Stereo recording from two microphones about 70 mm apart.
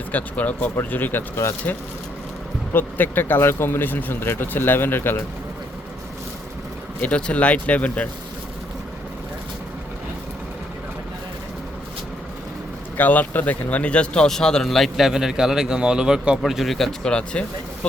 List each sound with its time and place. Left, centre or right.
0.1 s speech: left
2.7 s speech: left
7.0 s speech: centre
13.0 s speech: left; by 16.4 s centre
16.4 s speech: centre